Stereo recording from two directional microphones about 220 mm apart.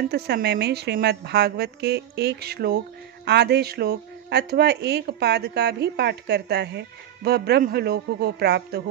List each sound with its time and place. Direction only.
0.1 s speech: 50° right (ahead or behind)